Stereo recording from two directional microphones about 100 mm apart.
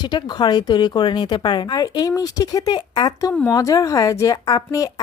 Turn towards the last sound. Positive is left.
turn(degrees=40)  # may be behind; listen again after turning